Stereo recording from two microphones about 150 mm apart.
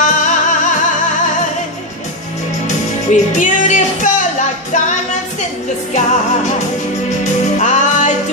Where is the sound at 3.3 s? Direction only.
55° left (ahead or behind).